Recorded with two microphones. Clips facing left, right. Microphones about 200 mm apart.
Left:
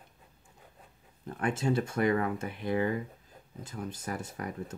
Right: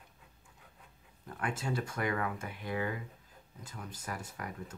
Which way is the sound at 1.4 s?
25° left (ahead or behind).